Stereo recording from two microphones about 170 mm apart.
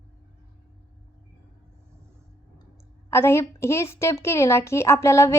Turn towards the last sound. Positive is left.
turn(degrees=15)  # may be behind; listen again after turning